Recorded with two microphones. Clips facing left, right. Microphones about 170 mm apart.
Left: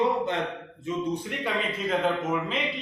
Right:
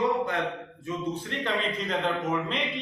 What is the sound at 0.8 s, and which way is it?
Speech, 15° left (ahead or behind).